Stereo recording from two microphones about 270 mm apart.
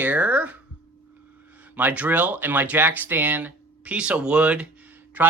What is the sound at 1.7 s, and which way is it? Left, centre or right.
Speech, centre.